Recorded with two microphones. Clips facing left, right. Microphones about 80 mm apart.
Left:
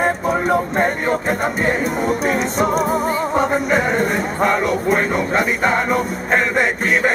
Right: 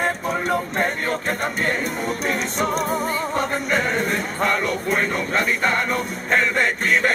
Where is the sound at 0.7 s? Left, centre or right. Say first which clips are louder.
Left 5 dB; centre.